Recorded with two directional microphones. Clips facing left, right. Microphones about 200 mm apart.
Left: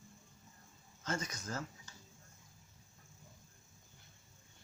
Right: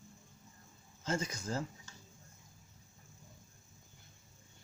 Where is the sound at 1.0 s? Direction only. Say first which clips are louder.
Right 4 dB; 30° right (ahead or behind).